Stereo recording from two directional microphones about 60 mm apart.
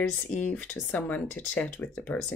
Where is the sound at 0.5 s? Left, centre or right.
Centre.